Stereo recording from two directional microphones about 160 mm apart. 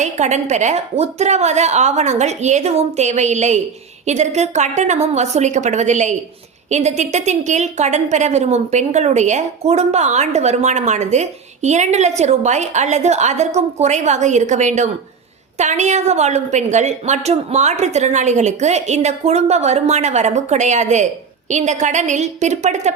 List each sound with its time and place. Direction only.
0.0 s a woman's voice: 45° right (ahead or behind)